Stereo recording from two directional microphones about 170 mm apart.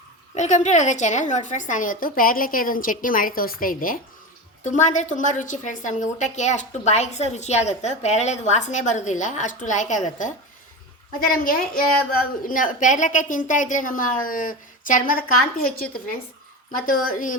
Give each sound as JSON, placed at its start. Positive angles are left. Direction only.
{"t": 0.3, "sound": "a woman's voice", "side_deg": 45}
{"t": 11.3, "sound": "a woman's voice", "side_deg": 55}